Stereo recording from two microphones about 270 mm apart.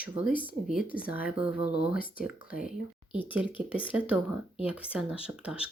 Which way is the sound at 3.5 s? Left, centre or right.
Centre.